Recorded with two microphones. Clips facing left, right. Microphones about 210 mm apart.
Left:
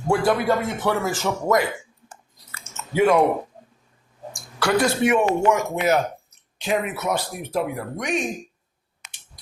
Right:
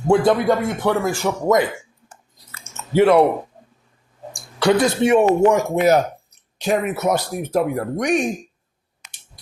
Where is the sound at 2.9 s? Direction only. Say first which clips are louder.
Right 4 dB; 75° right (ahead or behind).